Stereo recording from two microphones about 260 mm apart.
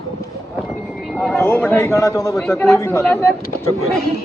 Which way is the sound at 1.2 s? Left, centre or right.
Centre.